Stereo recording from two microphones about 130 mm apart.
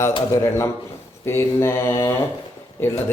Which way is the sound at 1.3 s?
20° left (ahead or behind).